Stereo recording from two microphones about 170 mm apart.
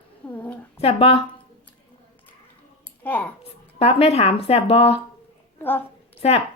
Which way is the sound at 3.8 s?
35° left (ahead or behind).